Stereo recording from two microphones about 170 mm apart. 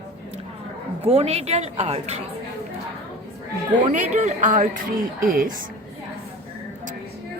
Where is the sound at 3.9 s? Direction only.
45° right (ahead or behind).